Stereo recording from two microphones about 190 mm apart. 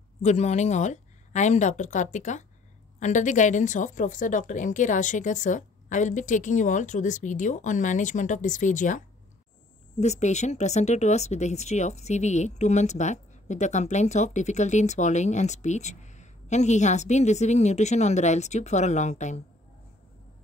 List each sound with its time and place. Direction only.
0.2 s speech: 35° left (ahead or behind)